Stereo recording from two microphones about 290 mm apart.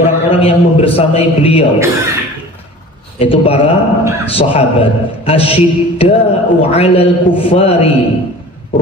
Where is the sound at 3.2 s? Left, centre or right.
Centre.